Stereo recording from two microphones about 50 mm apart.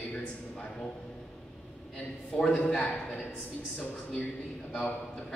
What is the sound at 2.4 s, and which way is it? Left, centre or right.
Speech, left.